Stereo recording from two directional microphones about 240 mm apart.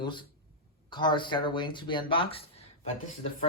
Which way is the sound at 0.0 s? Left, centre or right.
Centre.